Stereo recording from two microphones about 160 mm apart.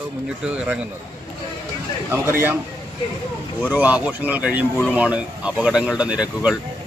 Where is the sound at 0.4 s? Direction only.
10° right (ahead or behind).